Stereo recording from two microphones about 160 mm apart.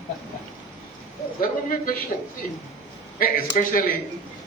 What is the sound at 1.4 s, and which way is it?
Speech, 60° left (ahead or behind).